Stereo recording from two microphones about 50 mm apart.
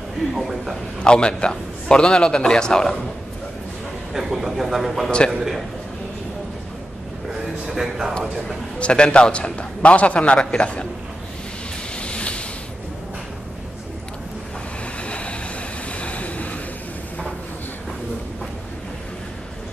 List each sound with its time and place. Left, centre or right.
0.3 s speech: centre
1.0 s a man's voice: centre
4.1 s speech: centre
7.6 s a man's voice: centre
8.7 s a man's voice: left
12.0 s waves: left
15.0 s vehicle: left